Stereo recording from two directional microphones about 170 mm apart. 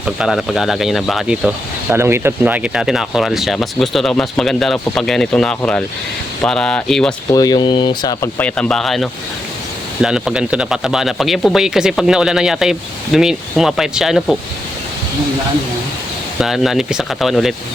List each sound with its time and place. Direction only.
0.0 s speech: 5° right (ahead or behind)
7.3 s speech: 25° left (ahead or behind)
8.4 s speech: 10° left (ahead or behind)
16.4 s speech: centre (ahead or behind)